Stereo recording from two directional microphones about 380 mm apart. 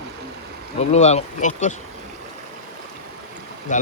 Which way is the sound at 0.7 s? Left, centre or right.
Centre.